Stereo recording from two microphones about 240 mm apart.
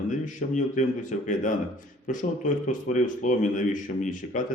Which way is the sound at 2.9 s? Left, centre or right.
Left.